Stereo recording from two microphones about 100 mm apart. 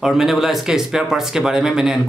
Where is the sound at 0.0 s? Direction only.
5° right (ahead or behind).